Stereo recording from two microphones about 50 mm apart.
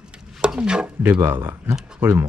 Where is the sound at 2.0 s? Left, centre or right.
Right.